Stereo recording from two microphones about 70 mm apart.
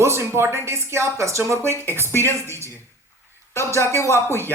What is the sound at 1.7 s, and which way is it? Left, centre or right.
Speech, left.